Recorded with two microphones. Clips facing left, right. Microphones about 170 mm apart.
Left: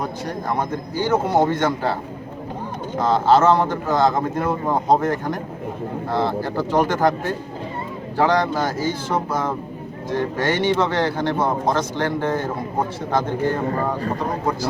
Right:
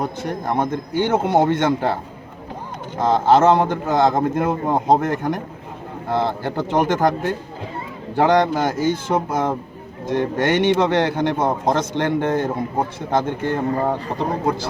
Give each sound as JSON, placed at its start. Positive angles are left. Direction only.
{"t": 0.0, "sound": "speech", "side_deg": -25}
{"t": 3.0, "sound": "speech", "side_deg": -20}
{"t": 8.1, "sound": "speech", "side_deg": -20}